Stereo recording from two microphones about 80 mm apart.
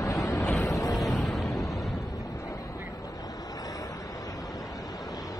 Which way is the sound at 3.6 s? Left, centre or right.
Left.